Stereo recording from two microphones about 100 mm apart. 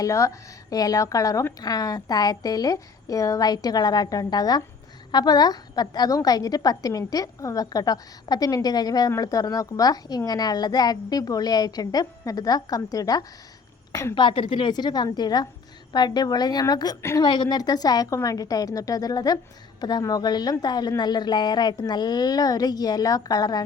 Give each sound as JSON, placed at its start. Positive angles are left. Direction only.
{"t": 0.0, "sound": "a woman's voice", "side_deg": 35}
{"t": 14.2, "sound": "a woman's voice", "side_deg": 55}
{"t": 17.0, "sound": "a woman's voice", "side_deg": 25}
{"t": 17.2, "sound": "a woman's voice", "side_deg": 45}